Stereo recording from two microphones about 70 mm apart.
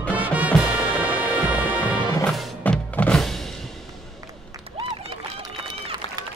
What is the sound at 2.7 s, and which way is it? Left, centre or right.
Music, left.